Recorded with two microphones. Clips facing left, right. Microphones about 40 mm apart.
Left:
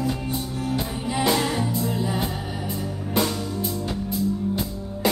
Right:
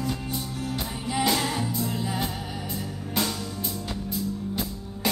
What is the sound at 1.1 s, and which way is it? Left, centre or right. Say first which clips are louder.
Music: left 3 dB; centre.